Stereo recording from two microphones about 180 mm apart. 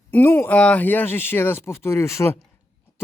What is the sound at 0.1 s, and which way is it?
A man's voice, 10° left (ahead or behind).